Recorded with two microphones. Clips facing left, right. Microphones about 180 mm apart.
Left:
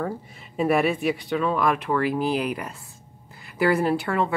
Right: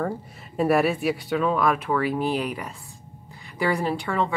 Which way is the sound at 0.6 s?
Centre (ahead or behind).